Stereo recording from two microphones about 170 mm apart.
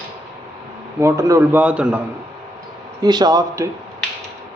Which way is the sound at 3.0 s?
25° right (ahead or behind).